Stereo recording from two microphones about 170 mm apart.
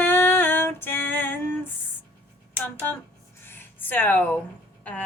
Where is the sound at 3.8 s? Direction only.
10° left (ahead or behind).